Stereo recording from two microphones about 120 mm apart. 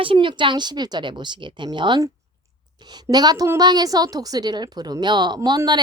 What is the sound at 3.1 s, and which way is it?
A woman's voice, 35° right (ahead or behind).